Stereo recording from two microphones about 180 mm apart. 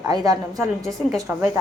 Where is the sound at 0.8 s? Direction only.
Centre (ahead or behind).